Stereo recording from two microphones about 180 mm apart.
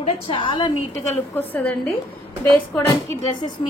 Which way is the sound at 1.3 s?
10° left (ahead or behind).